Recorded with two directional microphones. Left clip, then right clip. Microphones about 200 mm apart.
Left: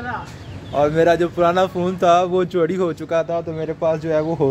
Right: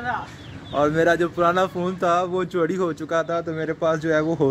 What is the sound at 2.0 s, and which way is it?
Speech, 15° left (ahead or behind).